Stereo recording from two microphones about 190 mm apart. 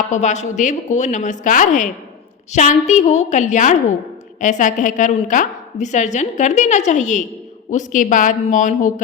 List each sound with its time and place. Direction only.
0.1 s a woman's voice: 35° left (ahead or behind)